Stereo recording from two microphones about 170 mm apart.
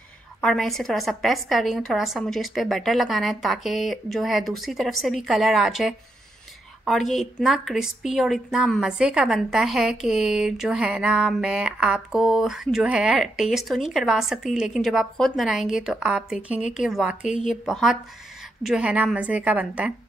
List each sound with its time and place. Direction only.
0.4 s a woman's voice: centre (ahead or behind)